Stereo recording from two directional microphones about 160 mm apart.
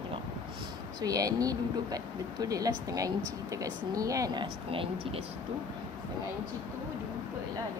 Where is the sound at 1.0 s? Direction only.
20° right (ahead or behind).